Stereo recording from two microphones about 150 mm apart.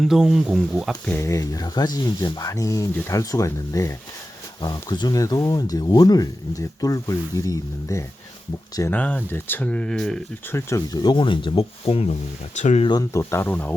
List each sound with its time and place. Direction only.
0.0 s speech: centre (ahead or behind)
1.0 s speech: 15° left (ahead or behind)
10.5 s speech: 20° left (ahead or behind); by 12.1 s 40° left (ahead or behind)
12.5 s speech: 50° left (ahead or behind)
12.8 s speech: 25° left (ahead or behind)